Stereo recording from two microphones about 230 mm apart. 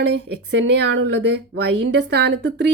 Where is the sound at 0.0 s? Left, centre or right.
Right.